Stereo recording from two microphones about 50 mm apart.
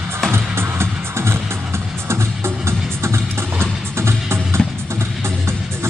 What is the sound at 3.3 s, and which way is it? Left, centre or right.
Music, right.